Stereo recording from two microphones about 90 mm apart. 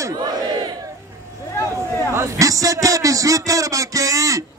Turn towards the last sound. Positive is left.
turn(degrees=-40)  # may be behind; listen again after turning